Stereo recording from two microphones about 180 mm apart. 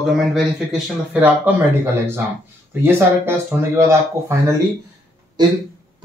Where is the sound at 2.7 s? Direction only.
10° right (ahead or behind).